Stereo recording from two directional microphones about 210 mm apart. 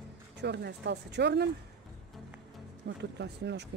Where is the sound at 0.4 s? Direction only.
50° right (ahead or behind).